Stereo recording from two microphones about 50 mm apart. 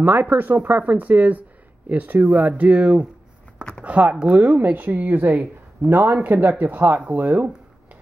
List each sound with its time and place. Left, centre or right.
0.0 s speech: right